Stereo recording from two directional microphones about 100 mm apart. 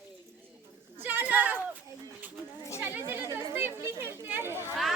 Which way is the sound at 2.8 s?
25° right (ahead or behind).